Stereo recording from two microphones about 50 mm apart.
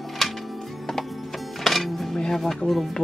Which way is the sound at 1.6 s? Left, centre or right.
Centre.